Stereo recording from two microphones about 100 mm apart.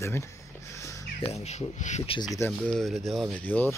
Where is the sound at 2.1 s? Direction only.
65° left (ahead or behind).